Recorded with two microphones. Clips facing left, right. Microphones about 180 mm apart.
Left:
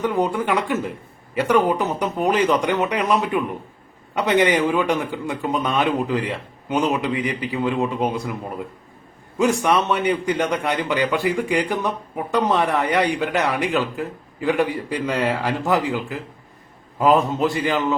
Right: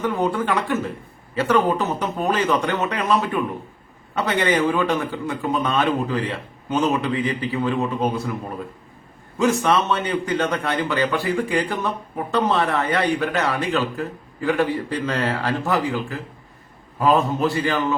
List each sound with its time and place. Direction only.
0.0 s a man's voice: 15° left (ahead or behind)
9.4 s a man's voice: 15° left (ahead or behind)